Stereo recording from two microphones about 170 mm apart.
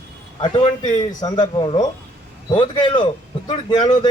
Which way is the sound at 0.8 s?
45° left (ahead or behind).